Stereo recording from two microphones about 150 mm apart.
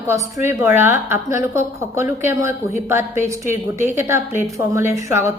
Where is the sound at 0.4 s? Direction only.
15° right (ahead or behind).